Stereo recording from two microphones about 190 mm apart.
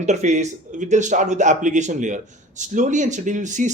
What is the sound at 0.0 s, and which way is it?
Speech, 40° right (ahead or behind).